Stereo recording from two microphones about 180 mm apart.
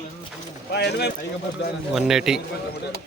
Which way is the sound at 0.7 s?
70° left (ahead or behind).